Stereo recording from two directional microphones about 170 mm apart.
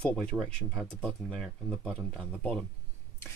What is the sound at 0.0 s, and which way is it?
Speech, 5° left (ahead or behind).